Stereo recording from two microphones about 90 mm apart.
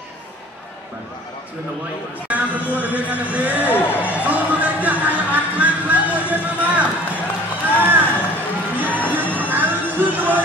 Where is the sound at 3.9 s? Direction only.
15° right (ahead or behind).